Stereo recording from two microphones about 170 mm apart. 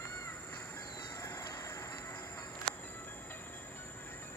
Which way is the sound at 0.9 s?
20° left (ahead or behind).